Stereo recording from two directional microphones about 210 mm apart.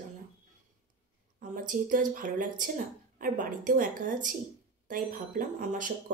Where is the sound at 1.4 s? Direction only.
40° right (ahead or behind).